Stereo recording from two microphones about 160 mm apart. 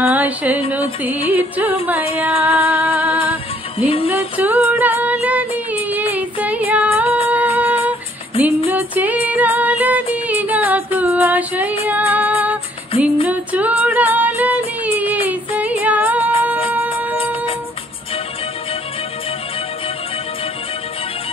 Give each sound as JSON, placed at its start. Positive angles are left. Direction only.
{"t": 0.0, "sound": "music", "side_deg": -10}
{"t": 3.7, "sound": "music", "side_deg": 35}
{"t": 4.1, "sound": "female singing", "side_deg": -10}
{"t": 8.6, "sound": "music", "side_deg": -10}
{"t": 11.8, "sound": "female singing", "side_deg": -10}
{"t": 13.0, "sound": "music", "side_deg": -10}